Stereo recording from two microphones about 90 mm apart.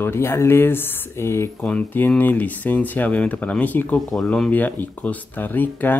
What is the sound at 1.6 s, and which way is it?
Speech, 20° left (ahead or behind).